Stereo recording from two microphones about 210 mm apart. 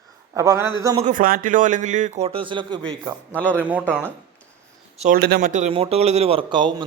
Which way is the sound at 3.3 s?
10° left (ahead or behind).